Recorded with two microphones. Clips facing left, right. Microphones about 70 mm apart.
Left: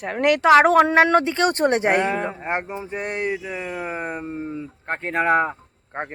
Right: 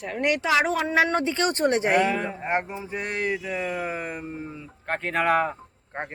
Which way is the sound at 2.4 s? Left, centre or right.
Centre.